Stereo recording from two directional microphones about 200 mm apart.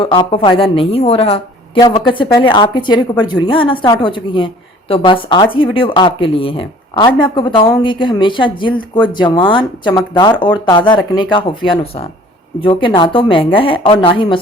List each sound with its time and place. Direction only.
0.0 s a woman's voice: 25° left (ahead or behind)